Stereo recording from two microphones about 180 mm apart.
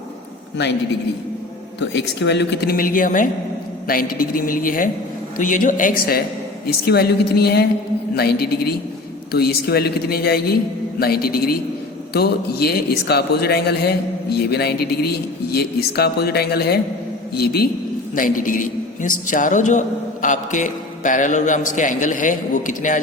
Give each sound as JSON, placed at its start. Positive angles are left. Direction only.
{"t": 1.8, "sound": "a man's voice", "side_deg": 75}
{"t": 18.1, "sound": "a man's voice", "side_deg": 50}